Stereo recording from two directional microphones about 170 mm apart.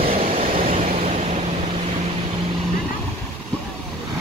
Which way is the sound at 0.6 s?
50° right (ahead or behind).